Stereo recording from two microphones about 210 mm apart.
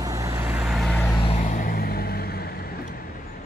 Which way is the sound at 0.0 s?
15° right (ahead or behind).